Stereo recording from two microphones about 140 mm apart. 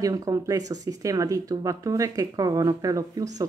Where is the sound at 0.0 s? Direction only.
25° right (ahead or behind).